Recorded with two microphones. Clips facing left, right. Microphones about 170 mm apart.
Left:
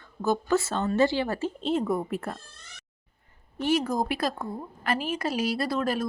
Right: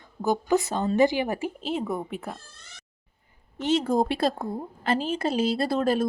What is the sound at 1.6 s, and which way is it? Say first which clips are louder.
Speech: left 5 dB; centre (ahead or behind).